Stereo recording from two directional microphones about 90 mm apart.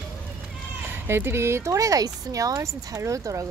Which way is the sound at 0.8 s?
25° right (ahead or behind).